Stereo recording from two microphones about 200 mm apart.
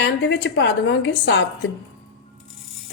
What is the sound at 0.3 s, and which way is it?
A woman's voice, 55° left (ahead or behind).